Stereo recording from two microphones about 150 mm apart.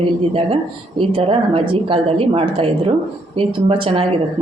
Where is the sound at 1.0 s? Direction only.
35° right (ahead or behind).